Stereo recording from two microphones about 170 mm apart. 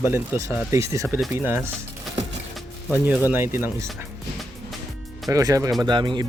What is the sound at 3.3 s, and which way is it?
Speech, 15° right (ahead or behind).